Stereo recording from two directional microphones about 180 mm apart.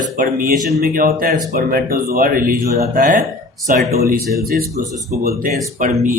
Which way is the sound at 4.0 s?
55° right (ahead or behind).